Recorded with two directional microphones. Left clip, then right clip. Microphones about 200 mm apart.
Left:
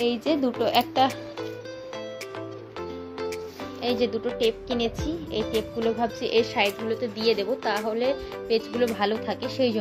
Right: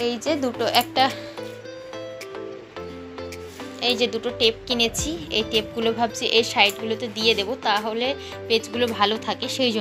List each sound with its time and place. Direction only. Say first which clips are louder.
0.0 s speech: right 1 dB; 20° left (ahead or behind)
3.8 s a woman's voice: right 3 dB; 15° left (ahead or behind)